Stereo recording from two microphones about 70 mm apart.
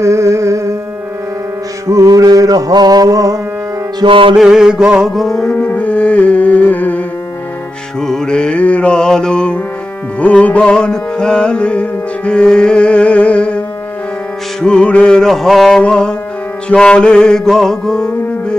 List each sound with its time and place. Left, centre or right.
0.0 s music: right
1.9 s music: right
4.0 s mantra: right
4.4 s mantra: centre
5.1 s music: centre
5.4 s music: centre
8.0 s mantra: centre
10.2 s music: centre
14.6 s music: centre